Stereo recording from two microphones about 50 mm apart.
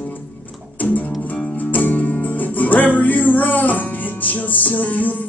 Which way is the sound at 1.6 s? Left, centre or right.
Left.